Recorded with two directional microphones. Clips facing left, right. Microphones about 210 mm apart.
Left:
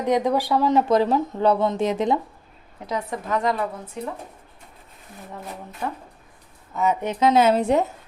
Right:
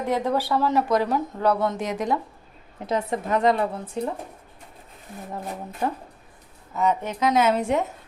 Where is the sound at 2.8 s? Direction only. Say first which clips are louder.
Right 3 dB; 25° right (ahead or behind).